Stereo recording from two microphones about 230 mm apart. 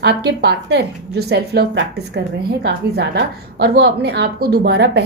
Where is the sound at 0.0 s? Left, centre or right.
Right.